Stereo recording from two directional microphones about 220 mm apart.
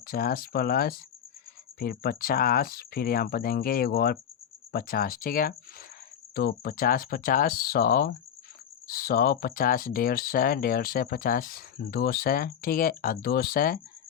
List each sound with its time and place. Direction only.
0.1 s speech: 40° left (ahead or behind)